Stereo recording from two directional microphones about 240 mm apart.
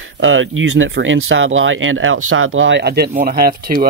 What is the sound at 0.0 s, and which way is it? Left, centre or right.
Speech, right.